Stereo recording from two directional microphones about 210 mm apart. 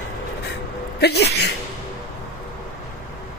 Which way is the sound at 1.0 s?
50° left (ahead or behind).